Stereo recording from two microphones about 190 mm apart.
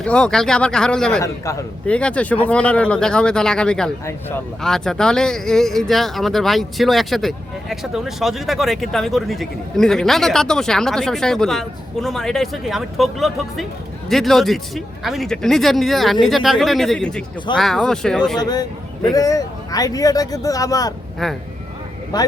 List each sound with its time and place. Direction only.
0.0 s speech: 5° left (ahead or behind)
1.2 s a man's voice: 15° left (ahead or behind)
18.3 s a man's voice: 20° left (ahead or behind)